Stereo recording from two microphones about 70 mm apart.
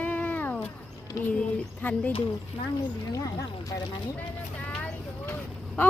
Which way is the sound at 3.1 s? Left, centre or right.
Left.